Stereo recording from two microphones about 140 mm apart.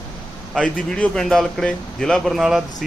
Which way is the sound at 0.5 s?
5° left (ahead or behind).